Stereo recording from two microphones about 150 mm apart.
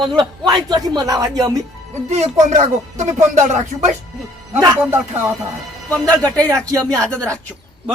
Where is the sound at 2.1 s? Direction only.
50° right (ahead or behind).